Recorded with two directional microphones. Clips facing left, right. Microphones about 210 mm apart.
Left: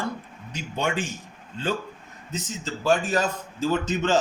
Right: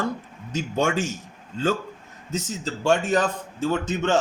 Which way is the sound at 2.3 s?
40° right (ahead or behind).